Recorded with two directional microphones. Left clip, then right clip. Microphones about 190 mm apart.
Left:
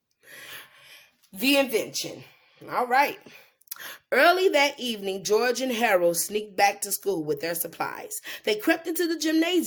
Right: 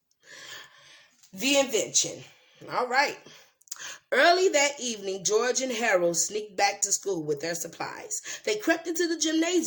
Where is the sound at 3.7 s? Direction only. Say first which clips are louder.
Left 2 dB; 25° left (ahead or behind).